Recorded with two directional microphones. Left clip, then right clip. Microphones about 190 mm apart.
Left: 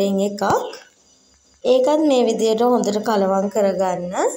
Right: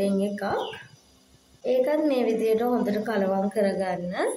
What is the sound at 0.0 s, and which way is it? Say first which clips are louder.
Speech: left 7 dB; 25° left (ahead or behind).